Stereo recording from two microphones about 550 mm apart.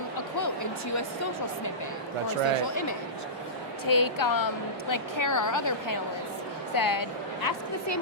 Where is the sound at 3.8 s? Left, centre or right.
Left.